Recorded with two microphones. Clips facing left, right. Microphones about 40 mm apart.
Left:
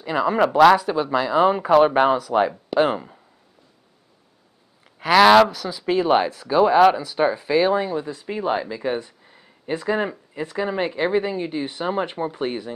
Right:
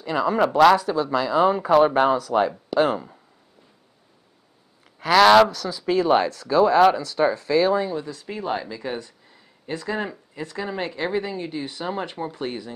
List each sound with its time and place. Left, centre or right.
0.0 s speech: centre
4.8 s speech: centre